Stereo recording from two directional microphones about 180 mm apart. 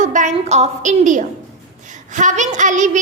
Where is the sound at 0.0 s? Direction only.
45° right (ahead or behind).